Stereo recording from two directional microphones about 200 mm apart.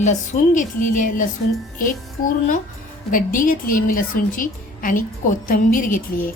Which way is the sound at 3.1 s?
40° left (ahead or behind).